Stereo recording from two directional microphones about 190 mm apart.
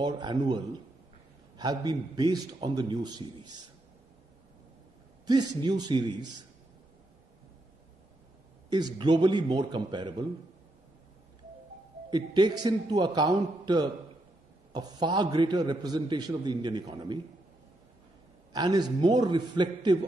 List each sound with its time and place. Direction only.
0.0 s a man's voice: 20° right (ahead or behind)
5.2 s a man's voice: 20° right (ahead or behind)
8.6 s a man's voice: 20° right (ahead or behind)
12.1 s a man's voice: 20° right (ahead or behind)
18.5 s a man's voice: 20° right (ahead or behind)